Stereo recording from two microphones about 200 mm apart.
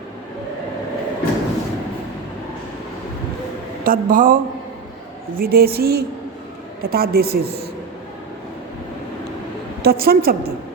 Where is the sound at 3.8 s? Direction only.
45° right (ahead or behind).